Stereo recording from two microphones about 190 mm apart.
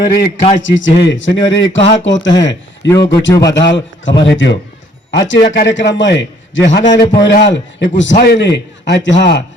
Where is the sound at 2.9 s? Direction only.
20° left (ahead or behind).